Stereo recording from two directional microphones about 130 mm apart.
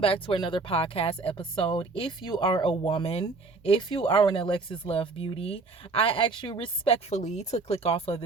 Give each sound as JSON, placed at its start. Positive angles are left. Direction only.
{"t": 0.0, "sound": "speech", "side_deg": 45}
{"t": 7.2, "sound": "speech", "side_deg": 65}